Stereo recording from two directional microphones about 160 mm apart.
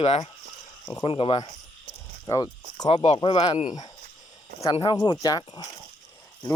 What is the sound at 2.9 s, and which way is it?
Speech, 35° left (ahead or behind).